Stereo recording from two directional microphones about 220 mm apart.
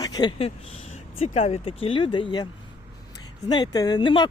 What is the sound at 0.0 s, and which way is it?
Speech, 15° left (ahead or behind).